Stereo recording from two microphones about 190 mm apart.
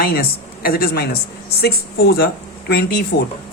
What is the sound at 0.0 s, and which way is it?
A woman's voice, 50° left (ahead or behind).